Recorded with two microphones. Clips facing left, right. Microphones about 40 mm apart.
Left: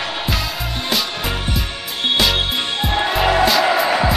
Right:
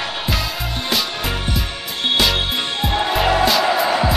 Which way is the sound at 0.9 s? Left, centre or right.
Centre.